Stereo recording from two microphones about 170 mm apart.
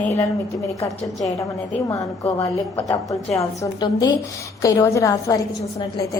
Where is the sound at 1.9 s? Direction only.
20° left (ahead or behind).